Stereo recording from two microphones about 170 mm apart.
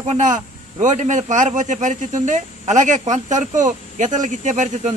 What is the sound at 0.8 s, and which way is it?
A man's voice, 45° right (ahead or behind).